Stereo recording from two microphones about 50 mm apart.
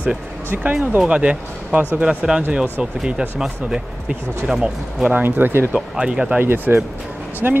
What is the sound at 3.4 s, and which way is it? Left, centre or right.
Speech, centre.